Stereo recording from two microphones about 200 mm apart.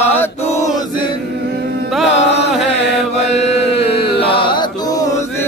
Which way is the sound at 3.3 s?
35° left (ahead or behind).